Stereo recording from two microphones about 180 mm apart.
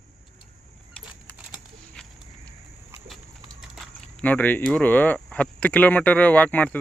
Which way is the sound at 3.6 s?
5° left (ahead or behind).